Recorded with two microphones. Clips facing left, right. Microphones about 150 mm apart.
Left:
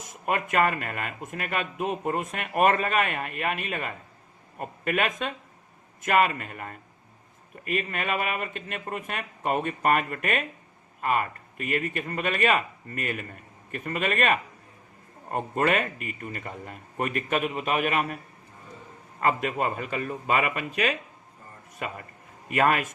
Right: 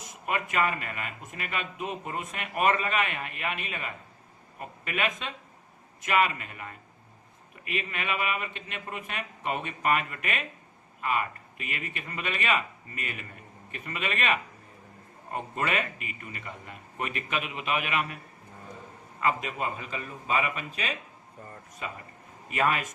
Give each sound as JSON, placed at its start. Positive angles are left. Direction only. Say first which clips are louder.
{"t": 0.0, "sound": "speech", "louder": "left 3 dB", "side_deg": 50}
{"t": 19.2, "sound": "a man's voice", "louder": "left 4 dB", "side_deg": 50}